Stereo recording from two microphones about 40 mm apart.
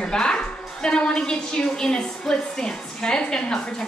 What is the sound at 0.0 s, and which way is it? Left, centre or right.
A woman's voice, centre.